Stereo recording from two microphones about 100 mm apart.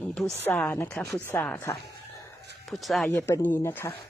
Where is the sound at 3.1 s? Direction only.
25° left (ahead or behind).